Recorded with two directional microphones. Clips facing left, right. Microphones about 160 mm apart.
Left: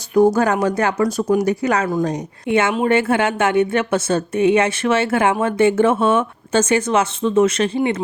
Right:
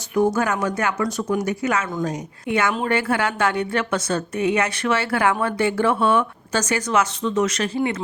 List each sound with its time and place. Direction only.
0.3 s a woman's voice: 30° left (ahead or behind)